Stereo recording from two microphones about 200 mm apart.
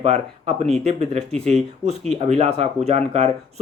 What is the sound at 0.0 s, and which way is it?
Speech, 30° right (ahead or behind).